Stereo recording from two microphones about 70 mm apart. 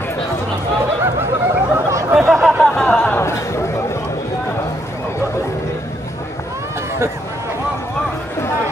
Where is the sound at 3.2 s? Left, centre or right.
Left.